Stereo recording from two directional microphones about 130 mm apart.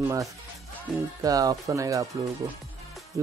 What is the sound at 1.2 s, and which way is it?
Speech, 30° right (ahead or behind).